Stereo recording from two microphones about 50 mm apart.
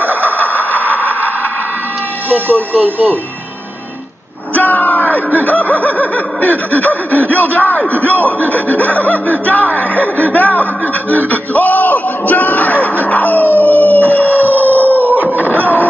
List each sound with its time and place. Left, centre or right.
0.0 s vehicle: right
2.2 s speech: right
4.6 s speech: left
13.0 s dog: left
14.3 s howl: right
15.3 s a sound: right